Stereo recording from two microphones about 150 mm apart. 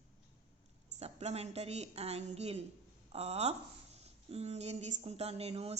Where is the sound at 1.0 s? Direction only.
45° right (ahead or behind).